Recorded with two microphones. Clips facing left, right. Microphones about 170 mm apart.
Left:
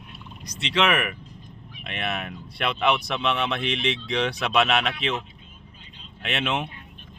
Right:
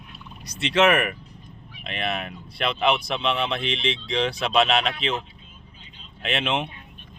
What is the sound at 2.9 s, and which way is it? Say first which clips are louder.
Speech: right 1 dB; 25° right (ahead or behind).